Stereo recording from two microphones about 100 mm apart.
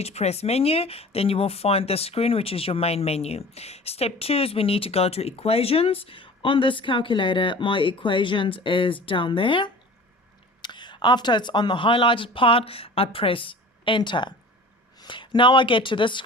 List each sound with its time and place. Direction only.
0.0 s speech: 90° left; by 16.2 s 55° left (ahead or behind)